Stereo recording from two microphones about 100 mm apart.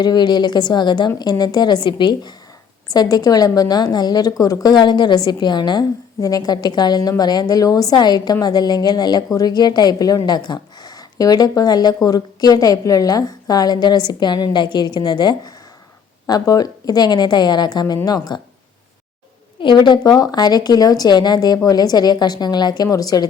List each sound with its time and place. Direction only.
0.0 s a woman's voice: 45° left (ahead or behind)
19.5 s a woman's voice: 50° left (ahead or behind)